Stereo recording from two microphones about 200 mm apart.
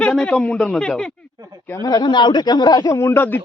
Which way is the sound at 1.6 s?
15° left (ahead or behind).